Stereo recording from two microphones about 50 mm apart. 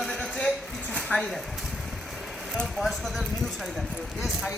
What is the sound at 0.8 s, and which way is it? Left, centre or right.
Dishes, left.